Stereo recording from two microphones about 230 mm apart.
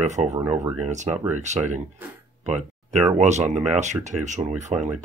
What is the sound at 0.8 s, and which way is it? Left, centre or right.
Speech, right.